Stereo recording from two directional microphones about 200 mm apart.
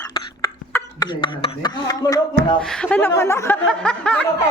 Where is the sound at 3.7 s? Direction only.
5° left (ahead or behind).